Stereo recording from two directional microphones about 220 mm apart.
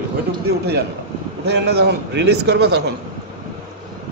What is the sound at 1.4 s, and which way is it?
A man's voice, 50° right (ahead or behind).